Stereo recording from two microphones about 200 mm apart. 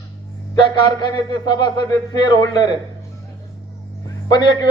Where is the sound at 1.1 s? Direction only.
20° left (ahead or behind).